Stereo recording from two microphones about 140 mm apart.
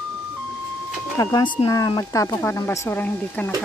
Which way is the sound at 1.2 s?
25° left (ahead or behind).